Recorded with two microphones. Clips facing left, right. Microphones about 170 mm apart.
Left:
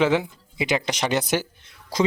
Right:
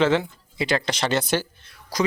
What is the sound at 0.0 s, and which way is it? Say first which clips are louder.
Speech: even; 15° left (ahead or behind).